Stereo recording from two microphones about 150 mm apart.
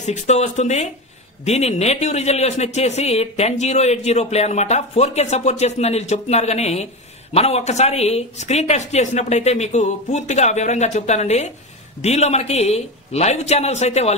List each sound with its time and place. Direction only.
0.0 s speech: 50° left (ahead or behind)